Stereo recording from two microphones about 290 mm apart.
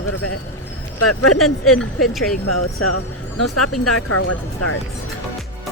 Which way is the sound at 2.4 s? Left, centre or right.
Left.